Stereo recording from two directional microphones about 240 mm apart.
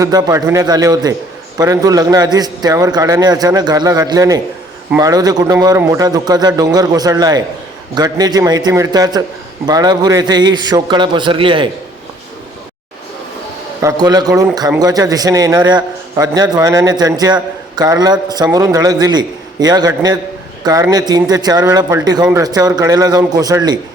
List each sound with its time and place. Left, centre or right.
0.0 s a man's voice: centre
13.8 s a man's voice: centre